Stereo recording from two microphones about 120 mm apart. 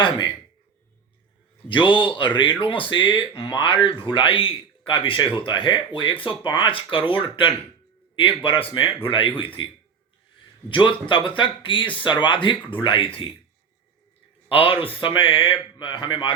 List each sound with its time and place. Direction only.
1.6 s speech: 45° left (ahead or behind)
10.7 s speech: 45° left (ahead or behind)
14.5 s speech: 50° left (ahead or behind)